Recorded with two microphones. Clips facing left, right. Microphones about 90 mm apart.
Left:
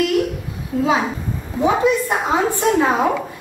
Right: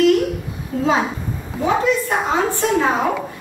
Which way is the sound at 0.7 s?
5° left (ahead or behind).